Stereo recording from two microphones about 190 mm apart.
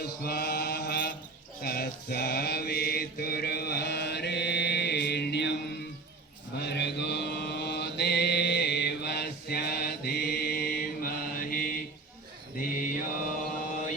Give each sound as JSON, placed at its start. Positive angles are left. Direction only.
{"t": 0.0, "sound": "mantra", "side_deg": 55}
{"t": 6.6, "sound": "mantra", "side_deg": 65}